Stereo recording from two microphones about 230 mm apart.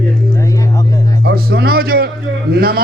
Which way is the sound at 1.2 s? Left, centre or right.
Right.